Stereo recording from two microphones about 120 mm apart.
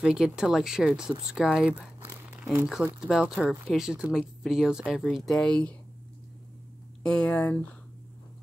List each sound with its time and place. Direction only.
0.0 s speech: 5° right (ahead or behind)
2.0 s crumpling: 15° right (ahead or behind)
2.5 s speech: 10° right (ahead or behind); by 5.8 s 10° left (ahead or behind)
7.0 s speech: 10° left (ahead or behind)